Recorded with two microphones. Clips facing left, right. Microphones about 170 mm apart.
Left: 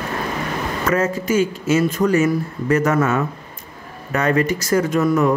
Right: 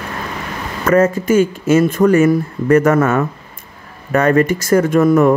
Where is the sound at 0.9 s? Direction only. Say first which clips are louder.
Right 7 dB; 50° right (ahead or behind).